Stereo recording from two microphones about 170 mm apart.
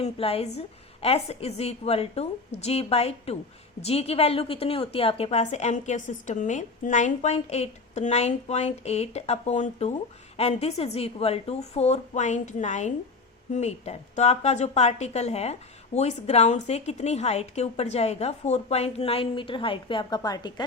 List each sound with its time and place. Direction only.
0.0 s a woman's voice: 35° left (ahead or behind)